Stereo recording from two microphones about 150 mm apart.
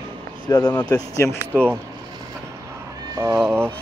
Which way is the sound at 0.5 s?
15° left (ahead or behind).